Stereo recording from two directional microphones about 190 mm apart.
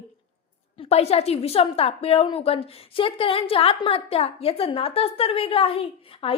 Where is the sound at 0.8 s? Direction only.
35° left (ahead or behind).